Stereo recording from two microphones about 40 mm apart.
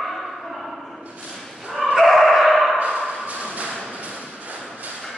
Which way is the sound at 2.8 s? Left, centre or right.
Right.